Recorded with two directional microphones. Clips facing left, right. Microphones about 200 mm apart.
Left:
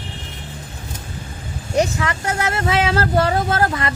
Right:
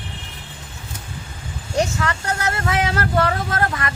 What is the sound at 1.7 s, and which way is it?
Speech, 20° left (ahead or behind).